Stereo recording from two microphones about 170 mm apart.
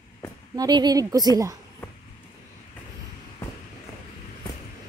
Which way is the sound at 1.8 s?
10° left (ahead or behind).